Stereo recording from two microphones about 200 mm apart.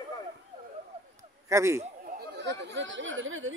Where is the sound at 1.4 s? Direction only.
15° right (ahead or behind).